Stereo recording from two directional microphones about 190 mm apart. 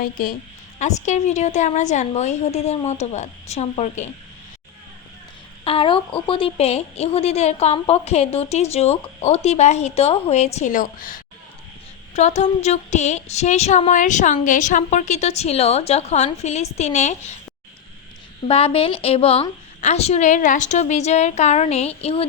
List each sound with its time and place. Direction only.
0.0 s a woman's voice: 50° left (ahead or behind)
0.8 s a woman's voice: 40° left (ahead or behind)
5.6 s a woman's voice: 30° left (ahead or behind); by 11.2 s 45° left (ahead or behind)
12.1 s a woman's voice: 35° left (ahead or behind)
18.4 s a woman's voice: 30° left (ahead or behind)